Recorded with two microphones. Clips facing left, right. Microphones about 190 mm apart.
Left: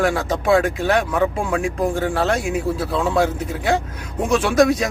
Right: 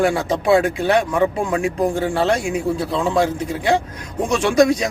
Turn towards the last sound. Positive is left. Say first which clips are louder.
# right 1 dB
turn(degrees=0)  # may be behind; listen again after turning